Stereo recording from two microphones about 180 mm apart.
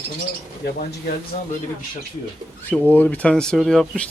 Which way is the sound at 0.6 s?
60° left (ahead or behind).